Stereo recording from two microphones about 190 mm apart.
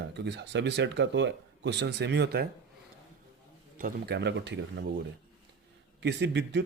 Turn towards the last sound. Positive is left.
turn(degrees=-65)  # may be behind; listen again after turning